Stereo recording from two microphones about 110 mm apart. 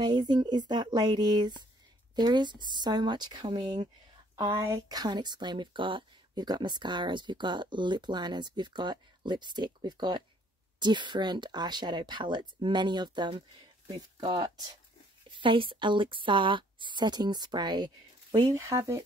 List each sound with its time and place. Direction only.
0.0 s speech: 40° right (ahead or behind)
4.4 s speech: 30° right (ahead or behind)
15.2 s speech: 50° right (ahead or behind); by 19.0 s 30° right (ahead or behind)